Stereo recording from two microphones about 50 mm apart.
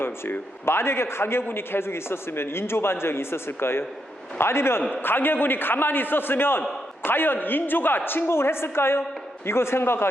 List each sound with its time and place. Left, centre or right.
0.0 s a man's voice: left
5.0 s a man's voice: left